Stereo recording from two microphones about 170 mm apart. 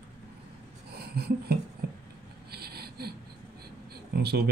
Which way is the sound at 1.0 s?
70° right (ahead or behind).